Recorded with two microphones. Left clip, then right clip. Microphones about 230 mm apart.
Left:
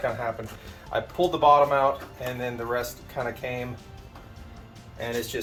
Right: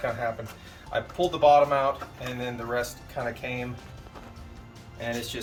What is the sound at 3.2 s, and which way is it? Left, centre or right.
Speech, centre.